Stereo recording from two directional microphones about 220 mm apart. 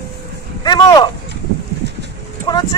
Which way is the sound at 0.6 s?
20° left (ahead or behind).